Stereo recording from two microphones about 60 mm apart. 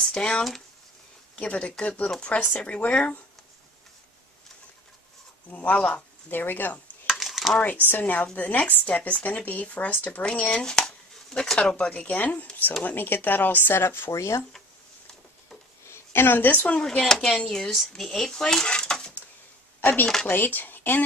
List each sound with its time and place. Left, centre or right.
0.0 s a sound: centre
1.4 s speech: centre
5.5 s speech: left
6.3 s speech: left
7.2 s a sound: centre
7.9 s speech: left
10.2 s speech: centre; by 14.1 s left
14.1 s speech: left
15.9 s a woman's voice: left
16.8 s speech: centre
19.8 s speech: left